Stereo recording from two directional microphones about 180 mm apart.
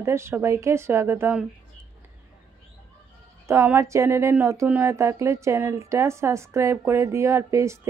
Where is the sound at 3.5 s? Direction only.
15° right (ahead or behind).